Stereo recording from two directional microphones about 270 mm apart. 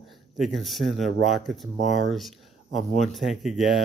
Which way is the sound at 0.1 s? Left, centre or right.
Centre.